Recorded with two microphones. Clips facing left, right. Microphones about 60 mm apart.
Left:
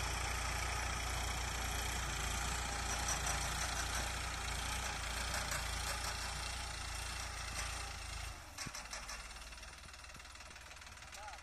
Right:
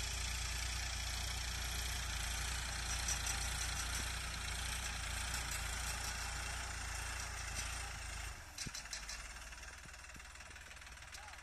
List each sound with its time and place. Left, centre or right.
0.0 s vehicle: left; by 5.9 s centre
5.9 s vehicle: left
6.5 s vehicle: centre